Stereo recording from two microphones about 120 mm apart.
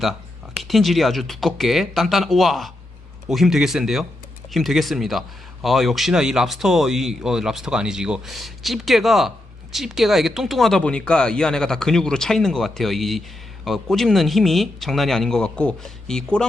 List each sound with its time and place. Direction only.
0.0 s speech: centre (ahead or behind)